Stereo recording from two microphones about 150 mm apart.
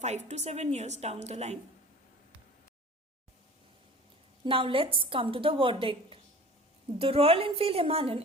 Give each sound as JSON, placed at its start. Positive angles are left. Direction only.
{"t": 0.0, "sound": "a woman's voice", "side_deg": -50}
{"t": 4.4, "sound": "a woman's voice", "side_deg": -35}